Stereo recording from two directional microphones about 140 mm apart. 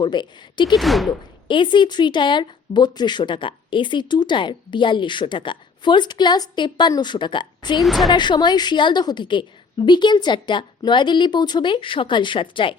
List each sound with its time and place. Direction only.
0.0 s speech: 30° left (ahead or behind)
0.8 s speech: centre (ahead or behind)
1.5 s speech: 35° left (ahead or behind)
7.8 s speech: centre (ahead or behind)
8.1 s speech: 35° left (ahead or behind)